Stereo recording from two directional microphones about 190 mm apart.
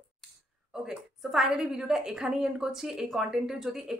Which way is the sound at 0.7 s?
5° right (ahead or behind).